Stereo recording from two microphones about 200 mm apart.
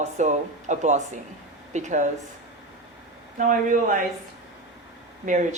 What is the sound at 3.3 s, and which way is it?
Speech, 40° right (ahead or behind).